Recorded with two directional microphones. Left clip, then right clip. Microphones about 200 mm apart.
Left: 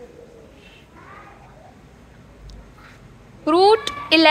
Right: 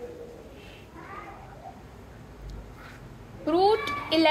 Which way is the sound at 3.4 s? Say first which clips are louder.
Left 8 dB; 45° left (ahead or behind).